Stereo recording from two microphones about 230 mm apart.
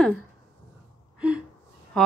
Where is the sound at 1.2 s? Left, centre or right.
Centre.